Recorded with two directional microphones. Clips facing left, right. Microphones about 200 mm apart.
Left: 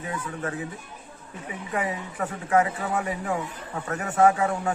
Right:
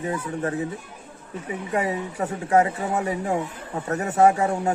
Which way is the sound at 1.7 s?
30° right (ahead or behind).